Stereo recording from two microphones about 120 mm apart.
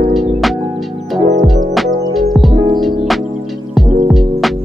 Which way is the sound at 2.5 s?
35° right (ahead or behind).